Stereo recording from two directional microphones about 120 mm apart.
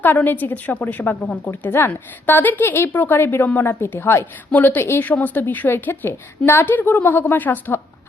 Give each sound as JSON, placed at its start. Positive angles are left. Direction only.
{"t": 0.0, "sound": "a woman's voice", "side_deg": 15}